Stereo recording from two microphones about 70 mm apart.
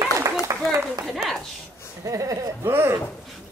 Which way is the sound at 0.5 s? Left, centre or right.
Right.